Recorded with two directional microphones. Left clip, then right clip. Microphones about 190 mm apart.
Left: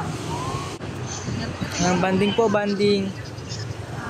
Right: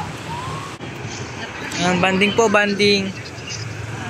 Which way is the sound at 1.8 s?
5° left (ahead or behind).